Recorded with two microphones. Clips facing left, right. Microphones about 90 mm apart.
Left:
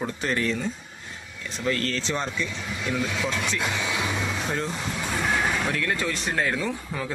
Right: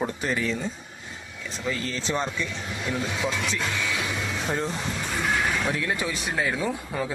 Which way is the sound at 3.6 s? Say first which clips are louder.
Left 1 dB; 20° left (ahead or behind).